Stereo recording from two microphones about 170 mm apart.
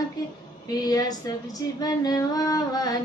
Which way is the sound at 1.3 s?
20° left (ahead or behind).